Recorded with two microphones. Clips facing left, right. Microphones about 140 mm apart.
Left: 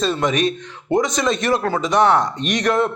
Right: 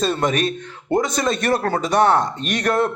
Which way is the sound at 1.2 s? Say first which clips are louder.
Left 1 dB; 55° right (ahead or behind).